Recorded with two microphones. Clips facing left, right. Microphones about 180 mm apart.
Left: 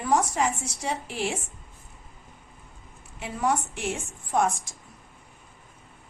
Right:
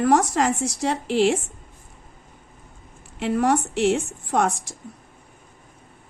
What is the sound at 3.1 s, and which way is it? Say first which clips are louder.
A woman's voice: right 6 dB; 70° right (ahead or behind).